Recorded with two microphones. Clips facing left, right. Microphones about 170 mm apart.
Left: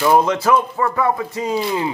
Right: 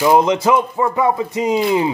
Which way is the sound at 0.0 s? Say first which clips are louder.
Right 2 dB; 15° right (ahead or behind).